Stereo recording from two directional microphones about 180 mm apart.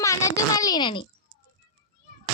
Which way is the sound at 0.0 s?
15° left (ahead or behind).